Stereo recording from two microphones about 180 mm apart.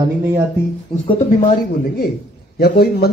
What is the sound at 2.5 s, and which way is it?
Speech, 60° left (ahead or behind).